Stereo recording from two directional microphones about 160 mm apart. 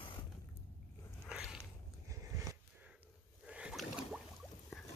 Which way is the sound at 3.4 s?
5° right (ahead or behind).